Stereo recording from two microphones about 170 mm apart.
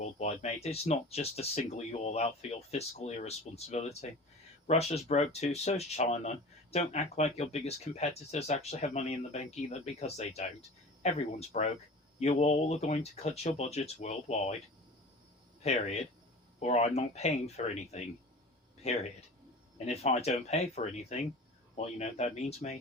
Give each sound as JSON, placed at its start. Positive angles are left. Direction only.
{"t": 0.0, "sound": "speech", "side_deg": 40}
{"t": 15.6, "sound": "speech", "side_deg": 40}